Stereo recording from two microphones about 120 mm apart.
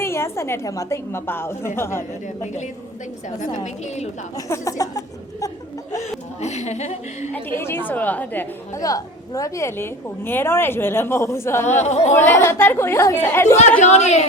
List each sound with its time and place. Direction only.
0.0 s a woman's voice: 20° left (ahead or behind)
2.2 s a woman's voice: 80° left
4.4 s a woman's voice: 25° left (ahead or behind)
6.4 s a woman's voice: 70° left (ahead or behind)
7.3 s a woman's voice: 20° left (ahead or behind)
8.8 s a woman's voice: 30° left (ahead or behind)
11.8 s a woman's voice: 70° left (ahead or behind)
12.1 s a woman's voice: 20° left (ahead or behind)
13.8 s a woman's voice: 75° left (ahead or behind)